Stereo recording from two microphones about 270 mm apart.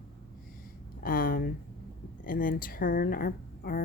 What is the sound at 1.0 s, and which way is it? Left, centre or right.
A woman's voice, left.